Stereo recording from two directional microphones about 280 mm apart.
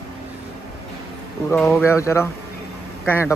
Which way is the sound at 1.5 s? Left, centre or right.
Centre.